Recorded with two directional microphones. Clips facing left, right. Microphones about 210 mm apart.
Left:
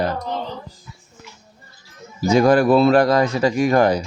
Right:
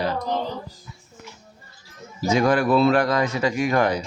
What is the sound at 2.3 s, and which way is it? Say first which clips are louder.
Speech: left 5 dB; 35° left (ahead or behind).